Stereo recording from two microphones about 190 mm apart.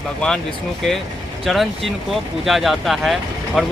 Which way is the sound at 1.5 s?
Centre (ahead or behind).